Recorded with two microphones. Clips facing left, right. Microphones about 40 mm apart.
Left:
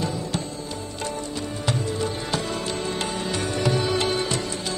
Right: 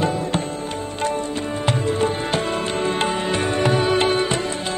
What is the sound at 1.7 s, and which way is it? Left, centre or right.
Music, right.